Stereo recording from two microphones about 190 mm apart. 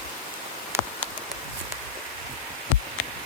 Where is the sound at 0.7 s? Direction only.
15° right (ahead or behind).